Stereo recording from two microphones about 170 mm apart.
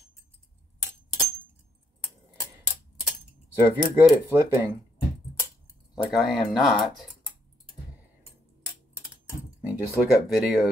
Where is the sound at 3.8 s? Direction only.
10° right (ahead or behind).